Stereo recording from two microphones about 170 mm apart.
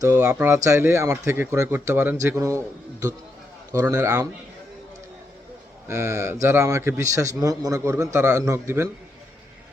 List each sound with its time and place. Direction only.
0.0 s a man's voice: 20° right (ahead or behind)
5.9 s a man's voice: 15° right (ahead or behind)